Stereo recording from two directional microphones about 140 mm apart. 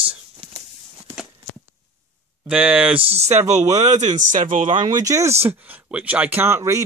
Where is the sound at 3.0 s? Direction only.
50° right (ahead or behind).